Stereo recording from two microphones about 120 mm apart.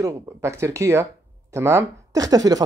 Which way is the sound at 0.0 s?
25° right (ahead or behind).